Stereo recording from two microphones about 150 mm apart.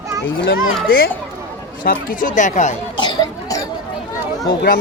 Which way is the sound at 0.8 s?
85° left.